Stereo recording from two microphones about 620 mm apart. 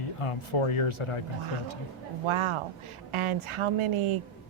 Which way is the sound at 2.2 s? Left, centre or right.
Right.